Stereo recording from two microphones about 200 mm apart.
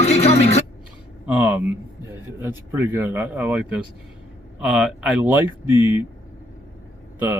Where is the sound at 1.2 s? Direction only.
5° right (ahead or behind).